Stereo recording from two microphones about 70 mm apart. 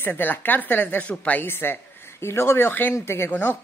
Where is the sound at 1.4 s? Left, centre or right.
Left.